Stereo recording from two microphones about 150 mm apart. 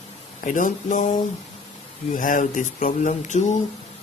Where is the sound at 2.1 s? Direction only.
65° left (ahead or behind).